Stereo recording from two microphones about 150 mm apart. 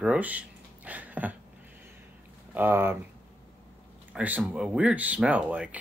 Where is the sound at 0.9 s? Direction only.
10° right (ahead or behind).